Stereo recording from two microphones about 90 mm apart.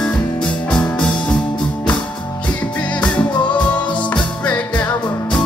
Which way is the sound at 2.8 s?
15° left (ahead or behind).